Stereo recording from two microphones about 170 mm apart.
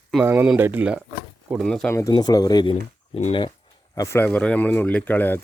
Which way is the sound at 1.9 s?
20° left (ahead or behind).